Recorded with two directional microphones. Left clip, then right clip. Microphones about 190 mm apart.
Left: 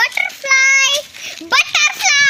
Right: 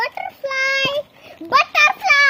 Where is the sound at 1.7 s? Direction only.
20° right (ahead or behind).